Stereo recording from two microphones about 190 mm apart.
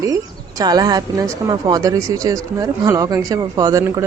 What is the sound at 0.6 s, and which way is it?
Speech, 20° right (ahead or behind).